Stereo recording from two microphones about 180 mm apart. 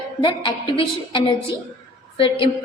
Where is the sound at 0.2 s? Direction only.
25° left (ahead or behind).